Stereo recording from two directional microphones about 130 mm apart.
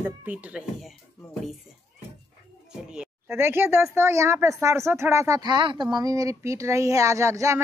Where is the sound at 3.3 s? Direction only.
20° right (ahead or behind).